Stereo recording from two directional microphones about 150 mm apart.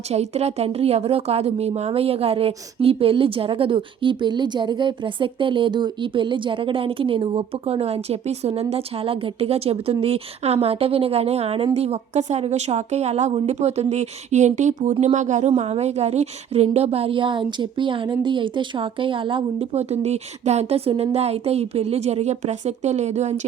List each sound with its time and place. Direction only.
0.1 s a woman's voice: 45° right (ahead or behind)